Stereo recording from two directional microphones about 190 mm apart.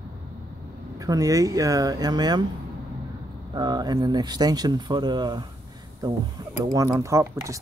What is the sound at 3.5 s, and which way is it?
Speech, 20° right (ahead or behind).